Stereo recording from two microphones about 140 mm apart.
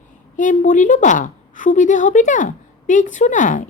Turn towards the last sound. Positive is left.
turn(degrees=65)  # may be behind; listen again after turning